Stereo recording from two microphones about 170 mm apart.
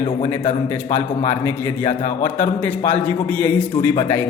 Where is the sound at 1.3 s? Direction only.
15° left (ahead or behind).